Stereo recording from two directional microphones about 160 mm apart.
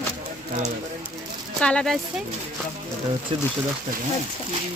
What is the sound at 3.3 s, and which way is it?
Speech, 35° right (ahead or behind).